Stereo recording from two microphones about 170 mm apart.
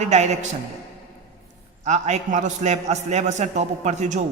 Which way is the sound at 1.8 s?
40° right (ahead or behind).